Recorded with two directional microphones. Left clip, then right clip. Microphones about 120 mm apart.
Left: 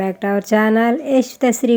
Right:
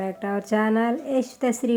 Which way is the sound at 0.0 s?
40° left (ahead or behind).